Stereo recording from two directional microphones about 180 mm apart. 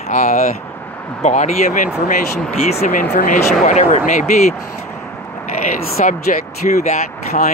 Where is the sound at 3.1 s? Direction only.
45° left (ahead or behind).